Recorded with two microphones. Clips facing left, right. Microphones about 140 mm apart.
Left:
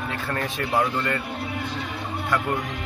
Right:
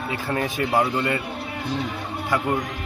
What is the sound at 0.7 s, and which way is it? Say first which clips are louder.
Speech: right 1 dB; 20° right (ahead or behind).